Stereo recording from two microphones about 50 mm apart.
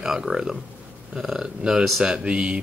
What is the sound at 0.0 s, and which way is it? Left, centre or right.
Speech, centre.